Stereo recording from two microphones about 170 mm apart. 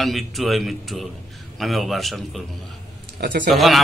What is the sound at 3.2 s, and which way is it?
Speech, 70° right (ahead or behind).